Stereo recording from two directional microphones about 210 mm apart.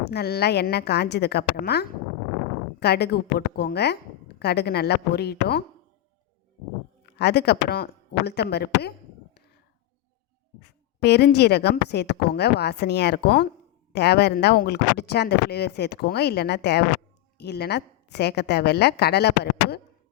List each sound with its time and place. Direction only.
0.1 s a woman's voice: 50° left (ahead or behind)
7.0 s a woman's voice: 50° left (ahead or behind)
10.6 s a woman's voice: 55° left (ahead or behind)